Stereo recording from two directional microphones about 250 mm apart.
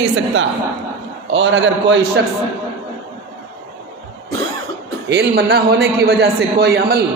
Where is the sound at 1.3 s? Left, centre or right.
Right.